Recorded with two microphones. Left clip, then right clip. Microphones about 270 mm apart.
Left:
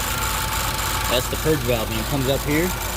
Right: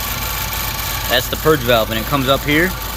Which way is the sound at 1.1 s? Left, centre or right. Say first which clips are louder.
Right 7 dB; centre.